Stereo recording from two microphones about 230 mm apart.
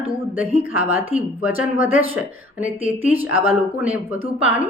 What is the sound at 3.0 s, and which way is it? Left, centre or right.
A woman's voice, centre.